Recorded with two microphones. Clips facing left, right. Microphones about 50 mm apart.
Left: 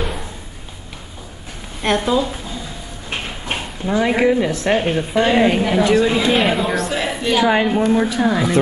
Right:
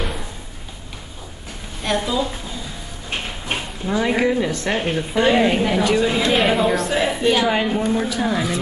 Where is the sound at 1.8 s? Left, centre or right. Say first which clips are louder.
Left 4 dB; left.